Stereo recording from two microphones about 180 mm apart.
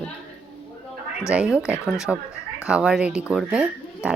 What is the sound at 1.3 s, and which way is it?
Speech, 5° right (ahead or behind).